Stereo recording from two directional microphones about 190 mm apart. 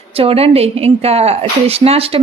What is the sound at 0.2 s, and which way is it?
A woman's voice, 30° right (ahead or behind).